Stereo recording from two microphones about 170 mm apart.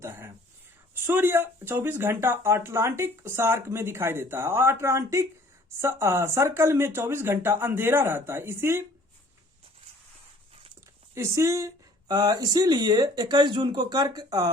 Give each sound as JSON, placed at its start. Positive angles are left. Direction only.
{"t": 0.0, "sound": "speech", "side_deg": -15}
{"t": 11.1, "sound": "speech", "side_deg": -15}